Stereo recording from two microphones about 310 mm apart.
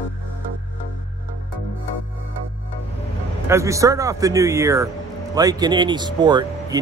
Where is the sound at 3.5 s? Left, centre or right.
Centre.